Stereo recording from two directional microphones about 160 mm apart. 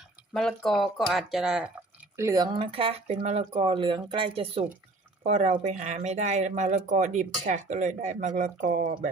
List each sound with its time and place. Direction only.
0.3 s speech: centre (ahead or behind)
2.1 s speech: 20° right (ahead or behind)
2.6 s speech: 35° right (ahead or behind)
5.2 s speech: 45° right (ahead or behind)